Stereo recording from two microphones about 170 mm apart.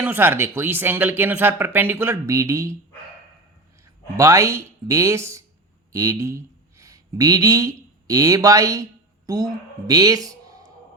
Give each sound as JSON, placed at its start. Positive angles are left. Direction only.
{"t": 0.0, "sound": "speech", "side_deg": -10}
{"t": 4.2, "sound": "speech", "side_deg": -15}